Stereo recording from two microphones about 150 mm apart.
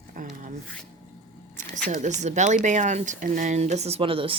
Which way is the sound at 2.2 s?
50° right (ahead or behind).